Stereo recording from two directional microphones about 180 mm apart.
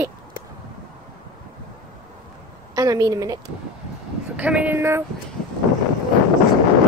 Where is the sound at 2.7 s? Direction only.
20° right (ahead or behind).